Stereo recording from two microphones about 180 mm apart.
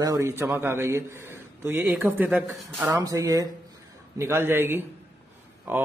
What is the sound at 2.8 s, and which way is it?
A man's voice, 20° right (ahead or behind).